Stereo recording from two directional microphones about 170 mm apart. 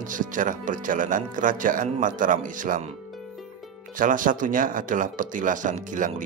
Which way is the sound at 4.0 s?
50° right (ahead or behind).